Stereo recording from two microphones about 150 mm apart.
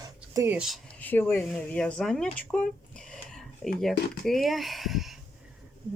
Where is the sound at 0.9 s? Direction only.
10° left (ahead or behind).